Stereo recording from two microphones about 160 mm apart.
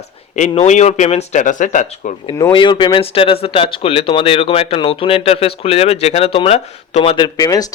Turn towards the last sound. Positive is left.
turn(degrees=20)  # may be behind; listen again after turning